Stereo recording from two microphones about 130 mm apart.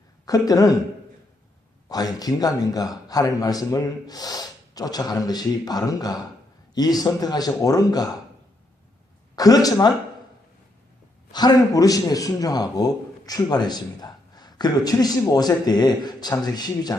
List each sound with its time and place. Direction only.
0.3 s a man's voice: 30° left (ahead or behind)
1.9 s a man's voice: 30° left (ahead or behind)
9.3 s speech: 30° left (ahead or behind)
11.3 s a man's voice: 30° left (ahead or behind)